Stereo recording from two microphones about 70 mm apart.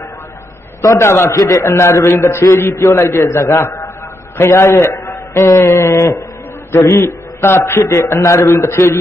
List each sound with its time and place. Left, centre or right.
0.8 s a man's voice: left
1.3 s a man's voice: left
1.6 s a man's voice: left
7.8 s a man's voice: left